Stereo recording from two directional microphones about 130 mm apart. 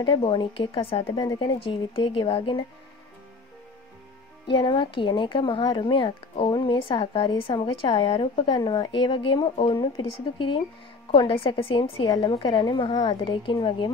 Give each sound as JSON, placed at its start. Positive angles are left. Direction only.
{"t": 0.0, "sound": "a woman's voice", "side_deg": 40}
{"t": 1.1, "sound": "a woman's voice", "side_deg": 35}
{"t": 4.5, "sound": "a woman's voice", "side_deg": 40}